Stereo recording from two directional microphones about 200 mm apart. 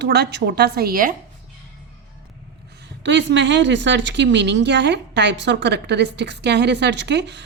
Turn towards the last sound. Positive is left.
turn(degrees=-60)  # may be behind; listen again after turning